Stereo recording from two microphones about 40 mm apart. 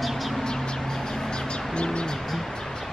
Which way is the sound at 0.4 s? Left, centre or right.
Centre.